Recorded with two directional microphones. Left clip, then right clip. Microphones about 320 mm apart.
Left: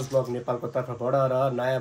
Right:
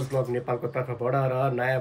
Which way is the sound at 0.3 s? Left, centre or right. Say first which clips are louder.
Even; centre.